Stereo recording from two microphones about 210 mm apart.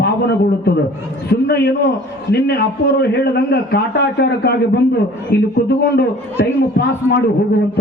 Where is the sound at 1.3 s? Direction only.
50° left (ahead or behind).